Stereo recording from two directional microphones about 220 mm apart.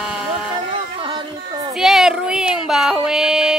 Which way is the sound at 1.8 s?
Centre (ahead or behind).